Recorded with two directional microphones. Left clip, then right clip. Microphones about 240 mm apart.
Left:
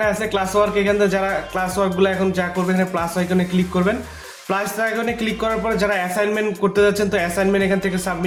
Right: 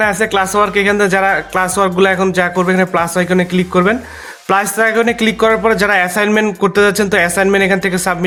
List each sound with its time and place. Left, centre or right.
0.0 s speech: right